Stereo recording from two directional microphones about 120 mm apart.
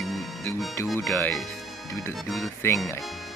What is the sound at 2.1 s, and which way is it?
Speech, centre (ahead or behind).